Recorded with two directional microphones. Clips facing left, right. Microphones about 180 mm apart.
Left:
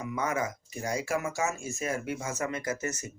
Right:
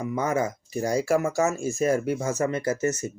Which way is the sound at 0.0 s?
30° right (ahead or behind).